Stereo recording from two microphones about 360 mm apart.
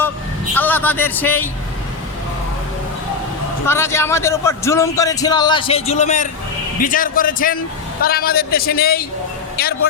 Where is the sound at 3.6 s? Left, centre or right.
Centre.